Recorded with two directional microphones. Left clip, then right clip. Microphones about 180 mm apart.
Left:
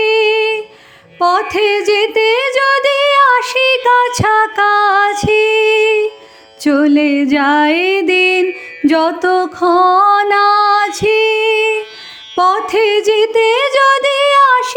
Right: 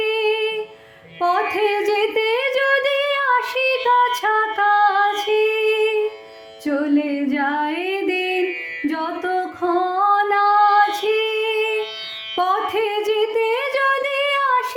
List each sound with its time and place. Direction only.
0.0 s humming: 40° left (ahead or behind)
1.2 s a sound: 40° left (ahead or behind)
6.7 s music: 50° left (ahead or behind)